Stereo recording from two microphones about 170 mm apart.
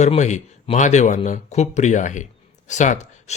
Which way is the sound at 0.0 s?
45° left (ahead or behind).